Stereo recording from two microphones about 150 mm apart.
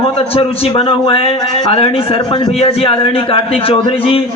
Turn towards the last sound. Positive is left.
turn(degrees=40)  # may be behind; listen again after turning